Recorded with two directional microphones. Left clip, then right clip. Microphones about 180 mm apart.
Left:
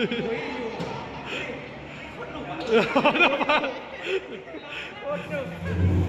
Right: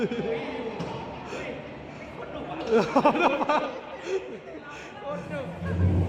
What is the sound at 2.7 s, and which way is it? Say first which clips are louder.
Speech: left 1 dB; 10° right (ahead or behind).